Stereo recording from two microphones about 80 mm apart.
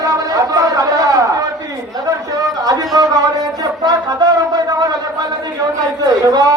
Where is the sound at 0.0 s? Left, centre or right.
Right.